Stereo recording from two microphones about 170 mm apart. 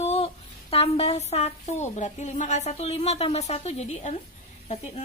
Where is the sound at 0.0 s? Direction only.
35° left (ahead or behind).